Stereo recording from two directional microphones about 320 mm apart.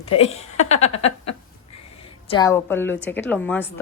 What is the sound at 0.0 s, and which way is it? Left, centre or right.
Speech, centre.